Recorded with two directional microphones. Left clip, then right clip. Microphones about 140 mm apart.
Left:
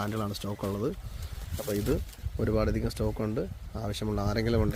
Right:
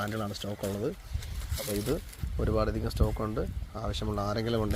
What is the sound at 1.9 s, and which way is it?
Speech, 40° left (ahead or behind).